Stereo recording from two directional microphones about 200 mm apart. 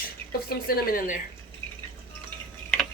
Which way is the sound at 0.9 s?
40° left (ahead or behind).